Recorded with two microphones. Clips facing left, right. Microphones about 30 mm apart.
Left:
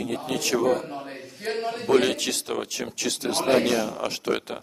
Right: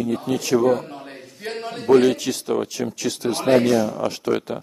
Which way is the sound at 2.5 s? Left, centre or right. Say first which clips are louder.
Right 6 dB; left.